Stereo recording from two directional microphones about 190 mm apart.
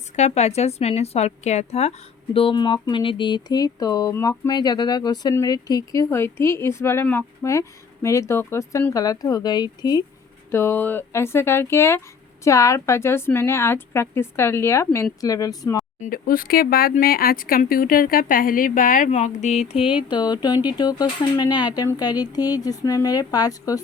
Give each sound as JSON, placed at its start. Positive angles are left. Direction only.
{"t": 0.2, "sound": "a woman's voice", "side_deg": 35}
{"t": 16.0, "sound": "speech", "side_deg": 50}